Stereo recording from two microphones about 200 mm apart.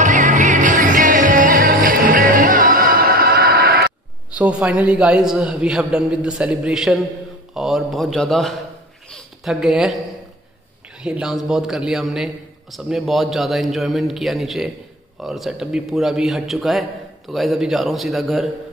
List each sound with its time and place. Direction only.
0.0 s music: 40° right (ahead or behind)
4.4 s a man's voice: 5° right (ahead or behind)
9.1 s a sound: centre (ahead or behind)
11.0 s a man's voice: 5° right (ahead or behind)